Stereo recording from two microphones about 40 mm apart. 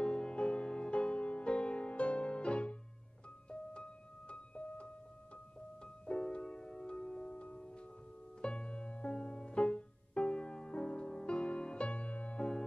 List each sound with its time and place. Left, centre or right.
0.0 s music: centre
6.0 s music: centre
12.4 s music: centre